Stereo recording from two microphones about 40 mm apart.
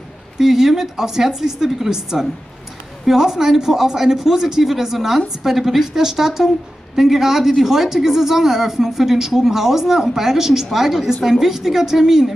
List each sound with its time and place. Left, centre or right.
0.4 s speech: centre